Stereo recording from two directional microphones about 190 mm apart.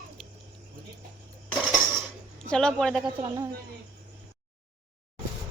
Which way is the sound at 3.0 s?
20° right (ahead or behind).